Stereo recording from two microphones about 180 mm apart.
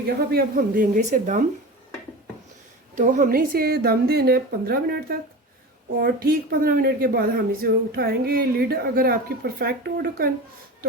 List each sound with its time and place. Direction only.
0.3 s speech: 55° right (ahead or behind)
2.9 s a woman's voice: 45° right (ahead or behind)